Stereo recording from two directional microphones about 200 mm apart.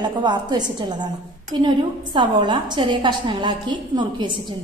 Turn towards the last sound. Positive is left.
turn(degrees=-20)  # may be behind; listen again after turning